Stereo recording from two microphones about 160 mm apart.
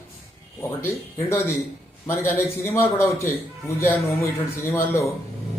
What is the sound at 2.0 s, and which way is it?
A man's voice, 15° left (ahead or behind).